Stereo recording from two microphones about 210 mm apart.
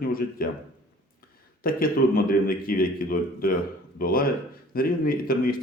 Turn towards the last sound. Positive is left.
turn(degrees=45)  # may be behind; listen again after turning